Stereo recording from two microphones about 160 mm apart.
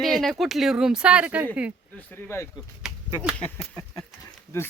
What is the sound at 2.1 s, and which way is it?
Speech, 15° left (ahead or behind).